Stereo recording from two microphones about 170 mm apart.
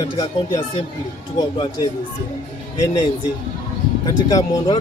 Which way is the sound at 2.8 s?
20° left (ahead or behind).